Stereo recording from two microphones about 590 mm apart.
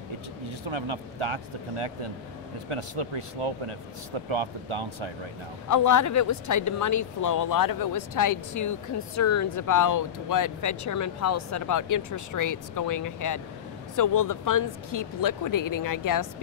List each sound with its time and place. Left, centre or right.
0.7 s speech: right
5.7 s speech: left